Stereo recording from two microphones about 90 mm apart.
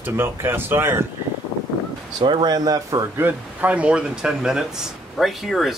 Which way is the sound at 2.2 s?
70° right (ahead or behind).